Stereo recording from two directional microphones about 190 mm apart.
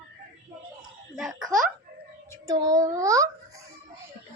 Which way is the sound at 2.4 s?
20° right (ahead or behind).